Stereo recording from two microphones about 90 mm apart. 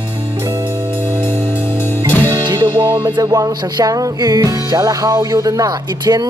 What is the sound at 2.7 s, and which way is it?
Music, 35° right (ahead or behind).